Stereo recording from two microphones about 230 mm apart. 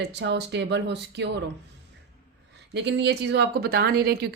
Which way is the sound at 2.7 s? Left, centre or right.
Right.